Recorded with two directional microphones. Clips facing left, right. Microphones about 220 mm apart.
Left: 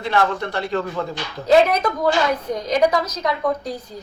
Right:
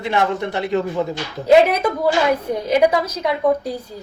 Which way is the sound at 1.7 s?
10° right (ahead or behind).